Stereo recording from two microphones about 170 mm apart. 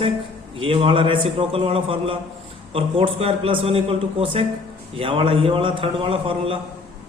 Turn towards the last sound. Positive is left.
turn(degrees=-30)  # may be behind; listen again after turning